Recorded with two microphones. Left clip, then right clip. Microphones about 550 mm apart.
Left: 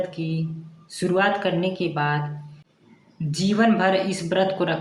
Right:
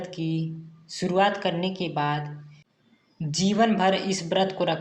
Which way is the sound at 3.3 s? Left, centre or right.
Left.